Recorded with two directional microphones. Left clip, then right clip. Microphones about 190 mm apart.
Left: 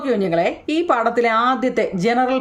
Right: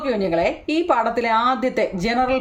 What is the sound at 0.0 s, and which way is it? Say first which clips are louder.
A woman's voice: left 2 dB; 20° left (ahead or behind).